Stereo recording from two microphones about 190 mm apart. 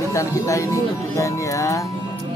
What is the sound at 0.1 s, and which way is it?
Speech, 15° left (ahead or behind).